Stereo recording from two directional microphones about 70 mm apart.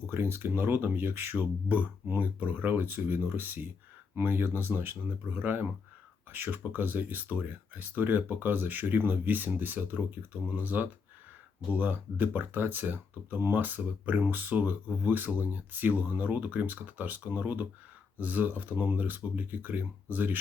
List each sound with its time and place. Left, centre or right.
0.1 s speech: right